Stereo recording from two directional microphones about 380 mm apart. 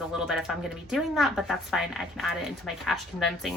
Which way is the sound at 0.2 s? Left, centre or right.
Centre.